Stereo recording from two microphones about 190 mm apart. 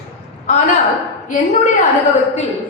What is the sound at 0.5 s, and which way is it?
Speech, 40° left (ahead or behind).